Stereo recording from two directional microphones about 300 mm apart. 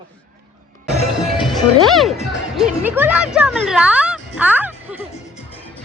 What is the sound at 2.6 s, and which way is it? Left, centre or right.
Speech, centre.